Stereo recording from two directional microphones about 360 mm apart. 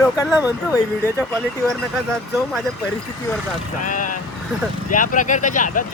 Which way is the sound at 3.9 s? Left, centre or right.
Left.